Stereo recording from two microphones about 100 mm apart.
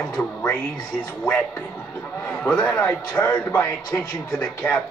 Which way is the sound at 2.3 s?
10° left (ahead or behind).